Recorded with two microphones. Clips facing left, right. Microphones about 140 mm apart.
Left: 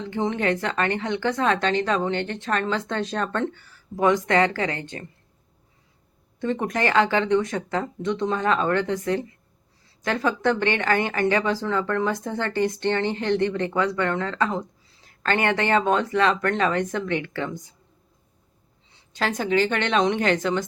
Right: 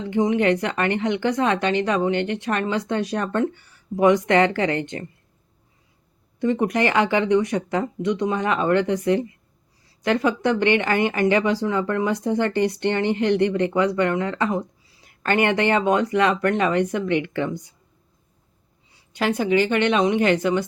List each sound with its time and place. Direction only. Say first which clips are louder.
0.0 s speech: right 5 dB; 15° right (ahead or behind)
6.4 s speech: right 4 dB; 15° right (ahead or behind)
18.9 s a sound: right 3 dB; 10° right (ahead or behind)
19.5 s speech: right 1 dB; 15° right (ahead or behind)